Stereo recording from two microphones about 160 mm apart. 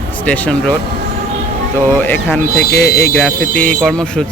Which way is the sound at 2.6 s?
80° left.